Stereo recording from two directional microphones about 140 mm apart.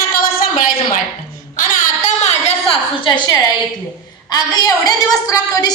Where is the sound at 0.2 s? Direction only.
90° left.